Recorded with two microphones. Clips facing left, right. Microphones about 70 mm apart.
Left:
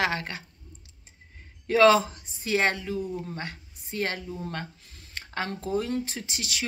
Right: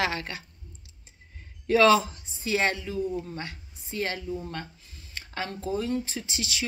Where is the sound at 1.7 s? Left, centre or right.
Left.